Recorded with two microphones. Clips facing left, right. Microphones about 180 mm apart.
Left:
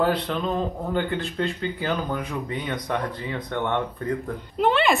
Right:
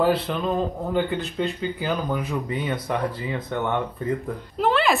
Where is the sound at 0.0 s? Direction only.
5° right (ahead or behind).